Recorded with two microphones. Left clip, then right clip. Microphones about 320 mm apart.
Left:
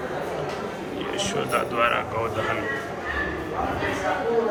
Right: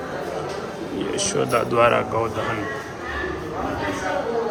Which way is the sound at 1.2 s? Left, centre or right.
Centre.